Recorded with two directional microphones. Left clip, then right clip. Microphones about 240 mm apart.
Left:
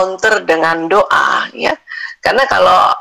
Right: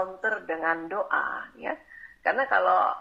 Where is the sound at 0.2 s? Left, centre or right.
Left.